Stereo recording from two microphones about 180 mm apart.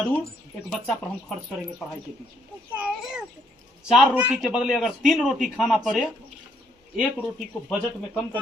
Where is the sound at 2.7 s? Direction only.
5° right (ahead or behind).